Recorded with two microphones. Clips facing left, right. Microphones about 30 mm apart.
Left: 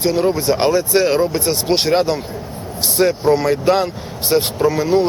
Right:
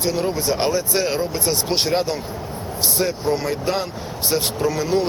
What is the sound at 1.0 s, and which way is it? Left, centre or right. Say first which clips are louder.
Speech: left 7 dB; left.